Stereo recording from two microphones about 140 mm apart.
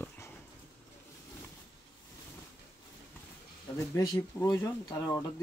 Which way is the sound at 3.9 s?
20° left (ahead or behind).